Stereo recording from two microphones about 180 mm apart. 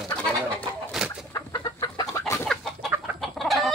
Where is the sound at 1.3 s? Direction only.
20° left (ahead or behind).